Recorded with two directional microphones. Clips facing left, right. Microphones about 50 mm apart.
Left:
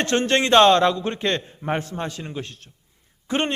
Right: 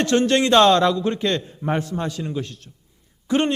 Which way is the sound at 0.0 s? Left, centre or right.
Left.